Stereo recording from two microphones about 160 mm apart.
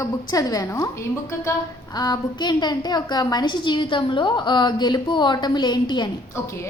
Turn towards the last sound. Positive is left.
turn(degrees=15)  # may be behind; listen again after turning